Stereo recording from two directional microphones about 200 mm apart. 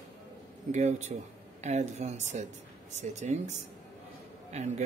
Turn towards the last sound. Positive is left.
turn(degrees=-35)  # may be behind; listen again after turning